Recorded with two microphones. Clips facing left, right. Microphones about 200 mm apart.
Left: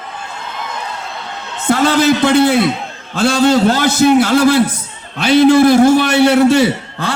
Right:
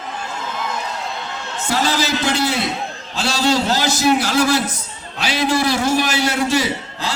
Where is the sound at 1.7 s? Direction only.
55° left (ahead or behind).